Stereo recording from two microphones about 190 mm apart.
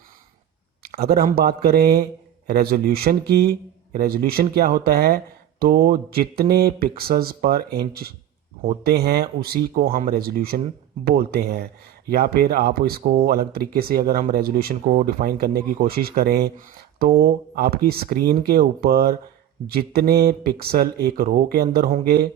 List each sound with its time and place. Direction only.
0.8 s speech: 55° right (ahead or behind)